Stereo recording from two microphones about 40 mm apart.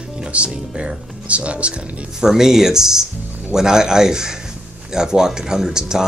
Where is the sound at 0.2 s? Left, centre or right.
Right.